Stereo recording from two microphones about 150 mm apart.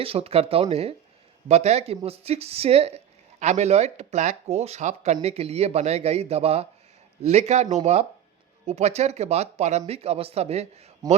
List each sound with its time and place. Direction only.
0.0 s speech: 40° right (ahead or behind)